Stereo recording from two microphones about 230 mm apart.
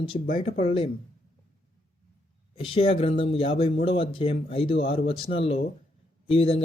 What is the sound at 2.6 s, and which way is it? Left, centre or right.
A man's voice, left.